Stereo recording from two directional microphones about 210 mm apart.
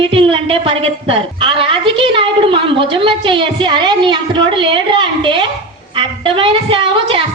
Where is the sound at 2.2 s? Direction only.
25° right (ahead or behind).